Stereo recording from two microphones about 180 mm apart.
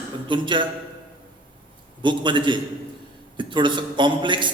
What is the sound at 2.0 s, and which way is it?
A man's voice, 25° right (ahead or behind).